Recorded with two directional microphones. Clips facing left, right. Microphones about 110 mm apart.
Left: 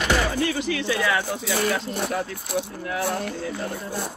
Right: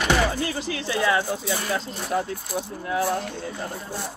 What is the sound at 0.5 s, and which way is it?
Speech, 30° right (ahead or behind).